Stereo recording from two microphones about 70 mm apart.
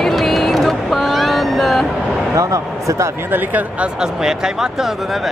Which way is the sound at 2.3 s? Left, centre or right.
Right.